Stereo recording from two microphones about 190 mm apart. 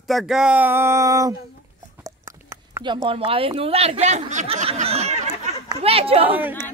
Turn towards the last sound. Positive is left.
turn(degrees=-30)  # may be behind; listen again after turning